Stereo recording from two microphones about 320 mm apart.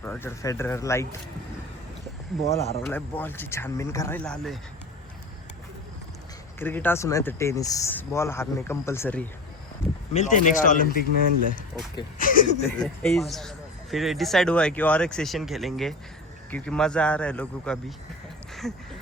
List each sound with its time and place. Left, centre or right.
0.0 s speech: centre
2.3 s speech: centre
6.6 s speech: centre
10.1 s speech: left
12.2 s speech: left
12.6 s speech: centre